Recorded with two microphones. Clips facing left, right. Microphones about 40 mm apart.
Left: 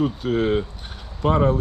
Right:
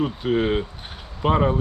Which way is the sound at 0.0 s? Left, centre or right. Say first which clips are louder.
Even; centre.